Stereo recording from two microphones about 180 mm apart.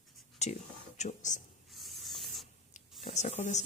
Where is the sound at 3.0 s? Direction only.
40° left (ahead or behind).